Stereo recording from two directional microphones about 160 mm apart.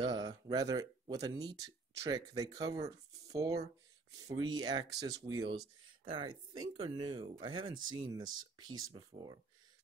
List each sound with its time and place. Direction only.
0.0 s speech: 25° right (ahead or behind)